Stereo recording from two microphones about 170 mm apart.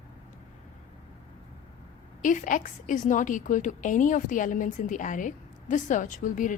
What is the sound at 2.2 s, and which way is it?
A woman's voice, 50° left (ahead or behind).